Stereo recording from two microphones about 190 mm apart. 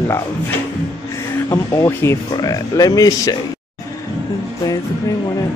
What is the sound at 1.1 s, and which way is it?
Speech, 20° left (ahead or behind).